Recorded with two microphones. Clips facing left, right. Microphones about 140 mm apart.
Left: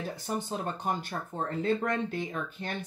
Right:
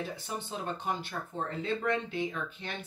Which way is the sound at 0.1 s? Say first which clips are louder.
Left 4 dB; 45° left (ahead or behind).